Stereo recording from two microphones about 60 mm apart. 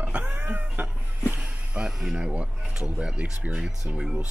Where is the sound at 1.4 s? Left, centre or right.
Centre.